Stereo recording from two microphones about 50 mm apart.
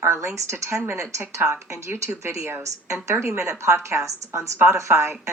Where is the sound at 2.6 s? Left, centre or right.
Right.